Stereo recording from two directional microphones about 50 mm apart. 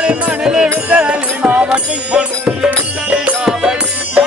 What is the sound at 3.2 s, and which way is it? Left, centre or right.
Music, centre.